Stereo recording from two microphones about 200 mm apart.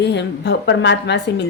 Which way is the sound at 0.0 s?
60° left (ahead or behind).